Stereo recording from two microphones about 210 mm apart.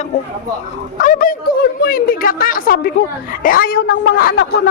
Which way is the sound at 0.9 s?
40° left (ahead or behind).